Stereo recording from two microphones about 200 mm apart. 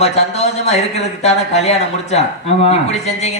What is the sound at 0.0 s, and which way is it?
Speech, 30° left (ahead or behind).